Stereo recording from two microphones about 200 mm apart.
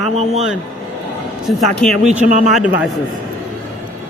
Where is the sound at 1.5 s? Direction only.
Centre (ahead or behind).